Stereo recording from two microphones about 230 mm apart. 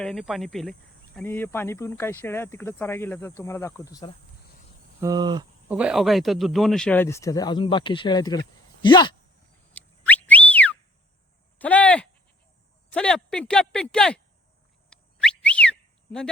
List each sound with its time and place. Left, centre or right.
0.0 s speech: centre
4.9 s speech: centre
5.7 s speech: centre
9.7 s whistle: centre
11.6 s a sound: centre
12.9 s speech: centre
14.8 s whistle: centre